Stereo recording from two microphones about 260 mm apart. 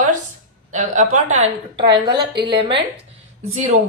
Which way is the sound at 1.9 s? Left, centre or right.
Centre.